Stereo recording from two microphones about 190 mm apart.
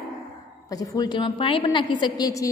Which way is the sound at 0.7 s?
20° left (ahead or behind).